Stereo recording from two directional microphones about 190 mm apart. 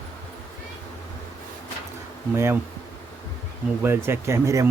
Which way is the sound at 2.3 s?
15° right (ahead or behind).